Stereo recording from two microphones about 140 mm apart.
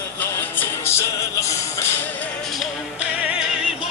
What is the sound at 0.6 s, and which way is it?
Music, 20° left (ahead or behind).